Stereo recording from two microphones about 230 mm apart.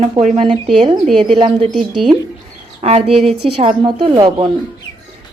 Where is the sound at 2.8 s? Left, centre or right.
Right.